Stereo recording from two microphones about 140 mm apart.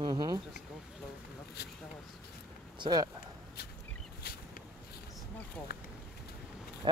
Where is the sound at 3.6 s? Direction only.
90° left.